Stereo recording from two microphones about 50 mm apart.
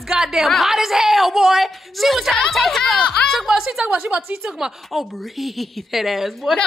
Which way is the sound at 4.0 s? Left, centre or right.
Right.